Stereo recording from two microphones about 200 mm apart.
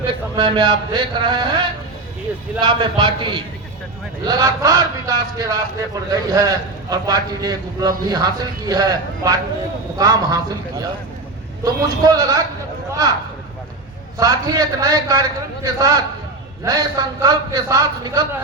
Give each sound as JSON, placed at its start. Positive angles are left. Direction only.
{"t": 0.3, "sound": "a man's voice", "side_deg": -25}
{"t": 14.2, "sound": "a man's voice", "side_deg": -20}